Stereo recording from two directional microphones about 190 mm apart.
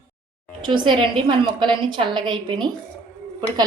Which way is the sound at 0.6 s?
25° right (ahead or behind).